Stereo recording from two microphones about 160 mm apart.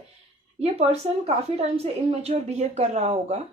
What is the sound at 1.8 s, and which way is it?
A woman's voice, 40° right (ahead or behind).